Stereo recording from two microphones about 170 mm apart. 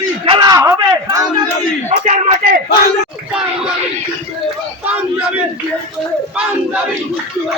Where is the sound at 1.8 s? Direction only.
40° right (ahead or behind).